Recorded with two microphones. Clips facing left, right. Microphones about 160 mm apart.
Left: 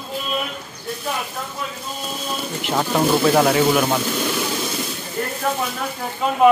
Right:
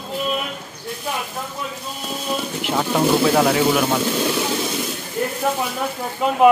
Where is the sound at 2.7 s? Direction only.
Centre (ahead or behind).